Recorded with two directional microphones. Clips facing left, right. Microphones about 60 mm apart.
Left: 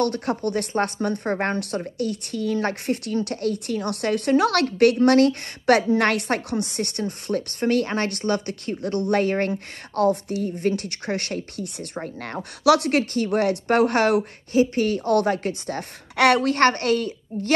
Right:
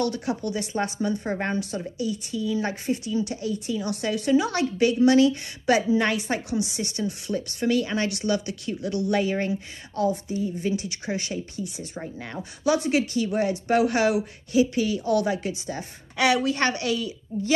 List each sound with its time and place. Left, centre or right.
0.0 s a woman's voice: left